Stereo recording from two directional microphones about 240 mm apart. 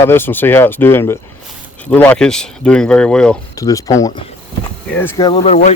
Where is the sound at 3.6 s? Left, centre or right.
Centre.